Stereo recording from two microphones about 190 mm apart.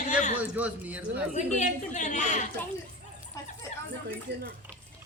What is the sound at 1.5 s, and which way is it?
Speech, 40° left (ahead or behind).